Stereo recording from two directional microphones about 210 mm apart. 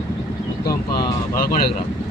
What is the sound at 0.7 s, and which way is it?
Speech, 20° left (ahead or behind).